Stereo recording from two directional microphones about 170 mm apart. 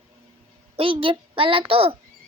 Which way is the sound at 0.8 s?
30° right (ahead or behind).